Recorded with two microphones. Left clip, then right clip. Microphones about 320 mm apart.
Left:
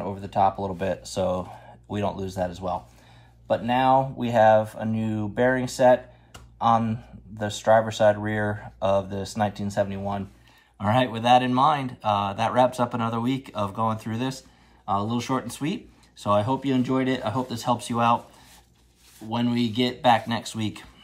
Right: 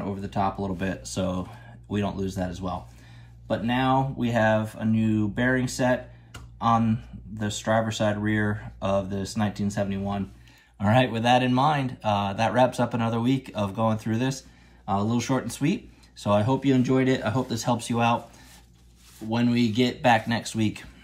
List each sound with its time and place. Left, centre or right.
0.0 s speech: centre
10.8 s speech: centre
19.2 s speech: centre